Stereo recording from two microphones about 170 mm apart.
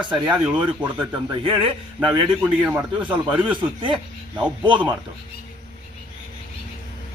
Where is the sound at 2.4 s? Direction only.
10° right (ahead or behind).